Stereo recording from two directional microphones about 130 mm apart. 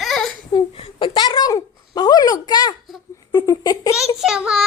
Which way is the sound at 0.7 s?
40° left (ahead or behind).